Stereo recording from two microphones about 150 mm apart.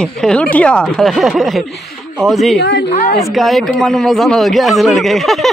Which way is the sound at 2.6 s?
90° left.